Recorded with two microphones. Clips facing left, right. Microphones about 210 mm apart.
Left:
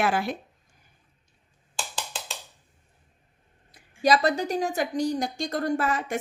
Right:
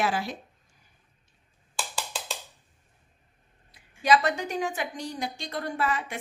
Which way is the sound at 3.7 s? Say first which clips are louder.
Left 1 dB; 40° left (ahead or behind).